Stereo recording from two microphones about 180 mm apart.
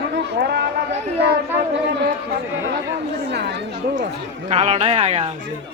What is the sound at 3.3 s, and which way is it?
Speech, 70° right (ahead or behind).